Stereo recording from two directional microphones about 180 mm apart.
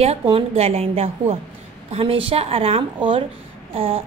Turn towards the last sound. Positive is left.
turn(degrees=-30)  # may be behind; listen again after turning